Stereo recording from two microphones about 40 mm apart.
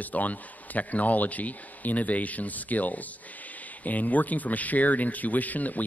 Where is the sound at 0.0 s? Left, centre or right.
Left.